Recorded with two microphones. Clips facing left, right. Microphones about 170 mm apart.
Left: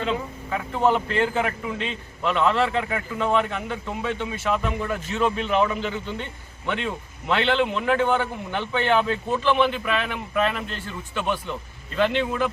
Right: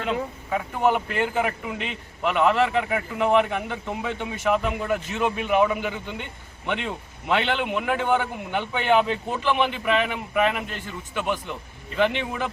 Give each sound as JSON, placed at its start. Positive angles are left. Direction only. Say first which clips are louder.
{"t": 0.5, "sound": "a man's voice", "louder": "left 1 dB", "side_deg": -15}